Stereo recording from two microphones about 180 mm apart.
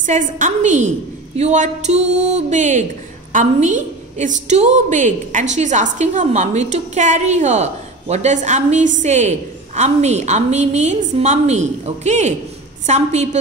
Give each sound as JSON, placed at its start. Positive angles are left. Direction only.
{"t": 0.0, "sound": "a woman's voice", "side_deg": -45}